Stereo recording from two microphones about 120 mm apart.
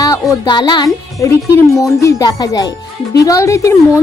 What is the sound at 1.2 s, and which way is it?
Speech, 25° left (ahead or behind).